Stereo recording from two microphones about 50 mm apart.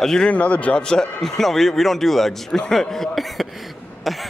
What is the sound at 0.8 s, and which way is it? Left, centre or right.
A man's voice, centre.